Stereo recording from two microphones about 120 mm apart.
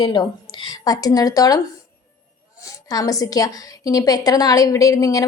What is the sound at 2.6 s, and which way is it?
A woman's voice, 30° left (ahead or behind).